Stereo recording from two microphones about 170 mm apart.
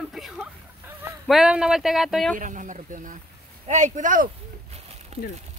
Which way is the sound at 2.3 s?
50° right (ahead or behind).